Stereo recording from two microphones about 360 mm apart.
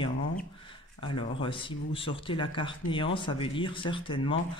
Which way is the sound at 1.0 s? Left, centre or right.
Centre.